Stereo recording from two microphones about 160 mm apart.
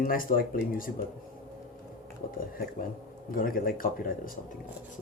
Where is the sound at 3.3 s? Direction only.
60° left (ahead or behind).